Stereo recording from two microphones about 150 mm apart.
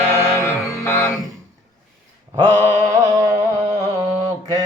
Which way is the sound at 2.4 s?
15° left (ahead or behind).